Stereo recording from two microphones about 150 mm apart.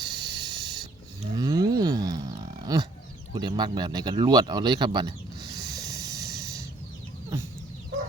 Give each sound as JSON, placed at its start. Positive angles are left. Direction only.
{"t": 0.0, "sound": "hiss", "side_deg": -30}
{"t": 1.4, "sound": "roaring cats", "side_deg": -25}
{"t": 3.3, "sound": "speech", "side_deg": -30}
{"t": 5.5, "sound": "snort", "side_deg": -25}